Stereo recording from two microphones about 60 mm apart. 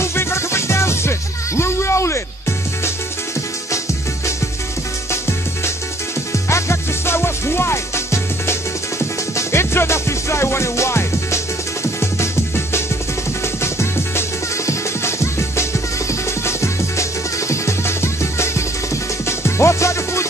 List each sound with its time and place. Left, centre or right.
0.0 s music: left
1.6 s a sound: left
6.5 s music: left
13.6 s music: left